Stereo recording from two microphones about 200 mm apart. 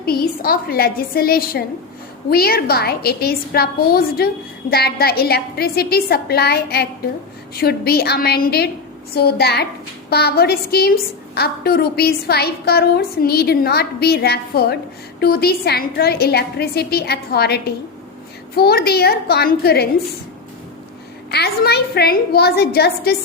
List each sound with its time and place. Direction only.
0.0 s a woman's voice: 50° left (ahead or behind)
21.2 s a woman's voice: 55° left (ahead or behind)